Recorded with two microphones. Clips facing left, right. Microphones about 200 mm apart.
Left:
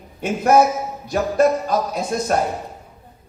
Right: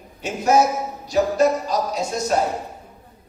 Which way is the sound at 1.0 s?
55° left (ahead or behind).